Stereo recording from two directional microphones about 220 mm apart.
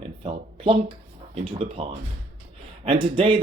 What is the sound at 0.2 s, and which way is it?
Speech, 25° right (ahead or behind).